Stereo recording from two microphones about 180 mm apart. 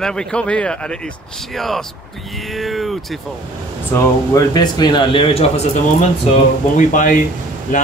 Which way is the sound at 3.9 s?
15° left (ahead or behind).